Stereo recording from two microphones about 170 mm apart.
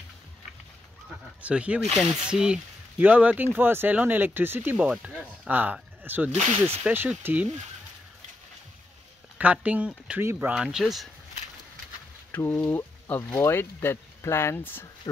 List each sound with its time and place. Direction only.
1.4 s speech: 5° right (ahead or behind)
9.4 s speech: 10° right (ahead or behind)
12.3 s speech: 10° left (ahead or behind)